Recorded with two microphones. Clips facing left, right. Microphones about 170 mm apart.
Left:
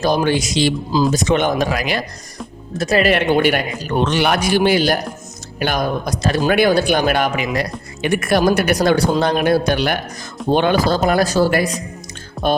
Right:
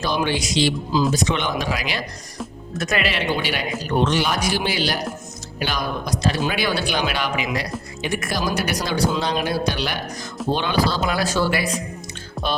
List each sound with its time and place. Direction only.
0.0 s speech: 45° left (ahead or behind)
2.7 s speech: 35° left (ahead or behind)
3.1 s speech: 55° left (ahead or behind)
4.0 s speech: 65° left (ahead or behind)
8.0 s speech: 60° left (ahead or behind); by 11.7 s 40° left (ahead or behind)